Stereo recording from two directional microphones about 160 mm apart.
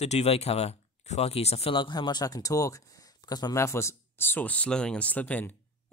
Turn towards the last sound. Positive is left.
turn(degrees=10)  # may be behind; listen again after turning